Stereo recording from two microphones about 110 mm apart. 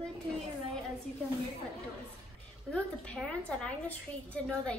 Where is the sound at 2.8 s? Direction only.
10° left (ahead or behind).